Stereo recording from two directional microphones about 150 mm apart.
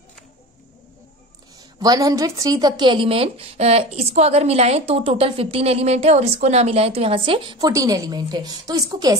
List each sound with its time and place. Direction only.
1.8 s speech: 25° right (ahead or behind)